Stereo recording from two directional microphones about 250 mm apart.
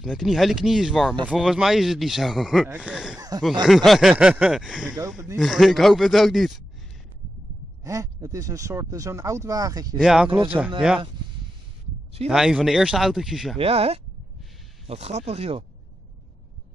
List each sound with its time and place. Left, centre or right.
0.0 s speech: centre
3.2 s speech: centre
3.6 s speech: centre
4.8 s speech: centre
5.1 s speech: centre
7.8 s speech: centre
9.9 s speech: centre
12.3 s speech: centre
13.6 s speech: right